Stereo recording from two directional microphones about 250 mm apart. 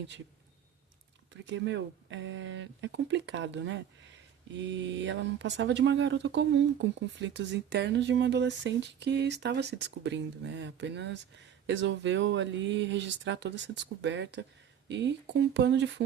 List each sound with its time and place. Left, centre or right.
1.5 s speech: right